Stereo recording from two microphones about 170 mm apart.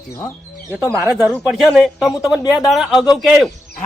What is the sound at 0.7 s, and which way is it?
A woman's voice, 5° left (ahead or behind).